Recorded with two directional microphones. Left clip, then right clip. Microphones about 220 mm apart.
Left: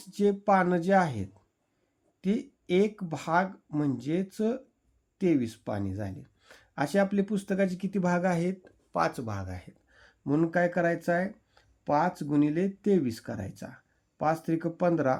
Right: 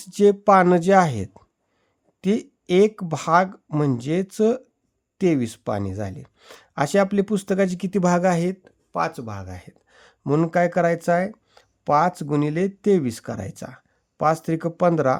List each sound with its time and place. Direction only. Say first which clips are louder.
0.0 s speech: right 10 dB; 40° right (ahead or behind)
9.9 s speech: right 7 dB; 35° right (ahead or behind)